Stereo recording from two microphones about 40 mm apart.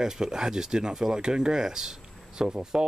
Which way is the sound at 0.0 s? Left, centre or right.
Centre.